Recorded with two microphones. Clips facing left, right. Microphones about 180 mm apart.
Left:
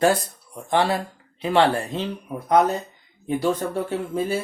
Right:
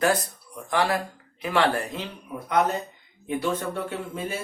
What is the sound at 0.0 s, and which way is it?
Speech, 30° left (ahead or behind).